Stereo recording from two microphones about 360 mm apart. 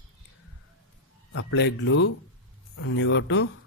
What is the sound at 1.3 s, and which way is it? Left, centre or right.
Speech, left.